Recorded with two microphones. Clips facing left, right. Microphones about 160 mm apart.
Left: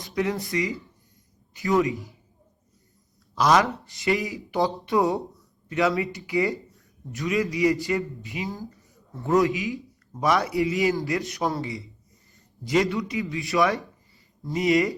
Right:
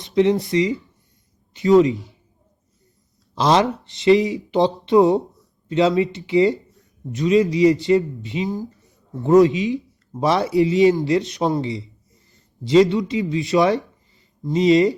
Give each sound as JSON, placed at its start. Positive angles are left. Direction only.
{"t": 0.0, "sound": "speech", "side_deg": -20}
{"t": 3.3, "sound": "speech", "side_deg": -25}